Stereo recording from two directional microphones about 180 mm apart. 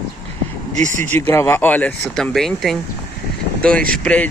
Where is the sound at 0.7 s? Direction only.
45° right (ahead or behind).